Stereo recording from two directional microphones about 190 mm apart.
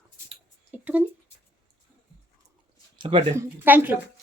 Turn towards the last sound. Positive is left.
turn(degrees=-10)  # may be behind; listen again after turning